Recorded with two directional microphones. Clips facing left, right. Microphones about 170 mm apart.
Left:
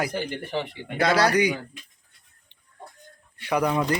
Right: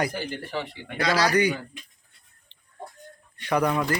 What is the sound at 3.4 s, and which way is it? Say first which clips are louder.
Speech: even; 10° left (ahead or behind).